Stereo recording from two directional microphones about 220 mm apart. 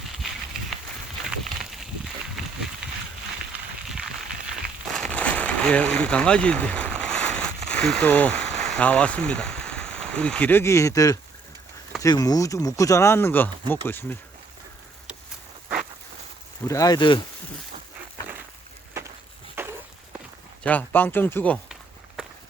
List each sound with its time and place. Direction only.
1.3 s a sound: centre (ahead or behind)
3.8 s a sound: 5° right (ahead or behind)
7.7 s speech: 5° left (ahead or behind)
16.6 s speech: 15° left (ahead or behind)
19.6 s run: 10° right (ahead or behind)
20.7 s speech: 10° left (ahead or behind)